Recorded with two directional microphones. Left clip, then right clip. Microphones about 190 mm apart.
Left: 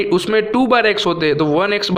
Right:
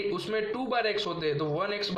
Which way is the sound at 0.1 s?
45° left (ahead or behind).